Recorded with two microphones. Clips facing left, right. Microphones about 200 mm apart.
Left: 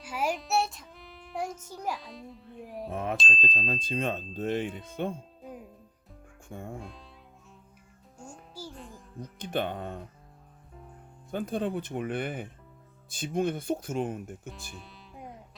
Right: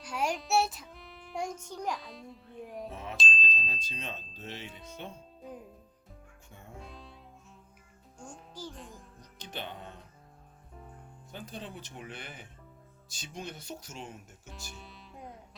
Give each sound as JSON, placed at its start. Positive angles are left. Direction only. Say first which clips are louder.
{"t": 0.0, "sound": "child singing", "louder": "left 2 dB", "side_deg": 5}
{"t": 2.9, "sound": "speech", "louder": "left 9 dB", "side_deg": 55}
{"t": 3.2, "sound": "speech", "louder": "left 3 dB", "side_deg": 0}
{"t": 3.5, "sound": "speech", "louder": "left 10 dB", "side_deg": 50}
{"t": 6.5, "sound": "speech", "louder": "left 13 dB", "side_deg": 50}
{"t": 6.7, "sound": "speech", "louder": "left 4 dB", "side_deg": 0}
{"t": 8.2, "sound": "a child's voice", "louder": "left 1 dB", "side_deg": 10}
{"t": 9.4, "sound": "speech", "louder": "left 10 dB", "side_deg": 55}
{"t": 11.3, "sound": "speech", "louder": "left 13 dB", "side_deg": 55}
{"t": 14.8, "sound": "music", "louder": "left 1 dB", "side_deg": 0}